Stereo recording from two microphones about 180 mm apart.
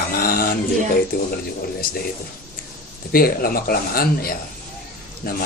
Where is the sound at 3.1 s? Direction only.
55° left (ahead or behind).